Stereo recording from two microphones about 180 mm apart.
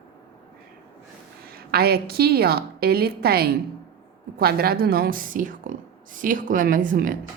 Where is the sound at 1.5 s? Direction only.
60° right (ahead or behind).